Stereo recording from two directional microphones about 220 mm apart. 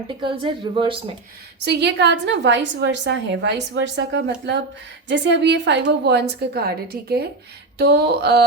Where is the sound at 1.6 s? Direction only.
50° right (ahead or behind).